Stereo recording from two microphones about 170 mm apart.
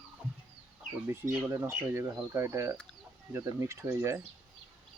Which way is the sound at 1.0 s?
15° right (ahead or behind).